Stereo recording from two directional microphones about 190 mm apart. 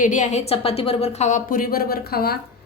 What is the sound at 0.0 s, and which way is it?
A woman's voice, 40° left (ahead or behind).